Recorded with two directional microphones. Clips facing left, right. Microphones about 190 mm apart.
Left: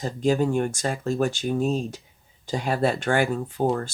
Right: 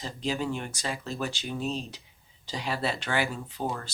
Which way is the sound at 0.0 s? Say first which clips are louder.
Left 9 dB; 50° left (ahead or behind).